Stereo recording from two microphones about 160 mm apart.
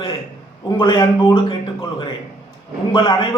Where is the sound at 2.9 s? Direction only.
30° left (ahead or behind).